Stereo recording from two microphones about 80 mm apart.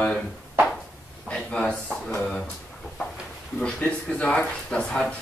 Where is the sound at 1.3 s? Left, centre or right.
Centre.